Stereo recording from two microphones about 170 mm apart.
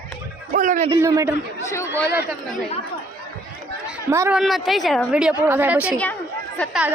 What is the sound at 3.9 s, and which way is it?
Speech, 15° right (ahead or behind).